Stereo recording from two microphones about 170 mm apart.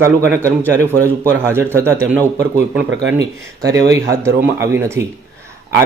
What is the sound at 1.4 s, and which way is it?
Speech, 15° right (ahead or behind).